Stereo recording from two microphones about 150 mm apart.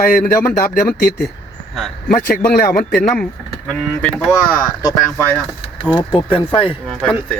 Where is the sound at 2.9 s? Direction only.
5° left (ahead or behind).